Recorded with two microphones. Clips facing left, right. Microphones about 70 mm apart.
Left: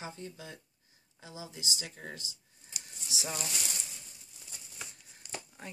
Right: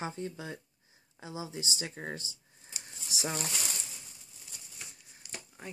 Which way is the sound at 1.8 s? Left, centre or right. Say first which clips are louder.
Right 5 dB; right.